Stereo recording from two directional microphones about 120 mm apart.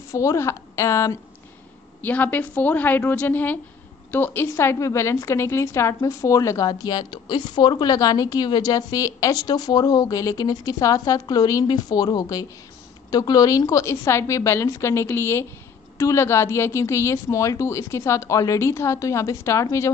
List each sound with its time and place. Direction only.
0.1 s a woman's voice: 25° left (ahead or behind)
2.0 s a woman's voice: 15° left (ahead or behind)